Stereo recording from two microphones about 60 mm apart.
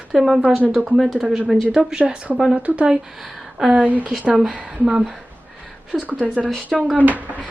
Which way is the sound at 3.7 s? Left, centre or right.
Right.